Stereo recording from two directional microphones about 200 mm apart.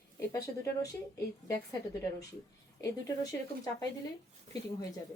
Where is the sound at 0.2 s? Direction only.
15° left (ahead or behind).